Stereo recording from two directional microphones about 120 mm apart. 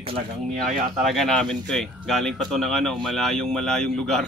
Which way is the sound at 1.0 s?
Centre (ahead or behind).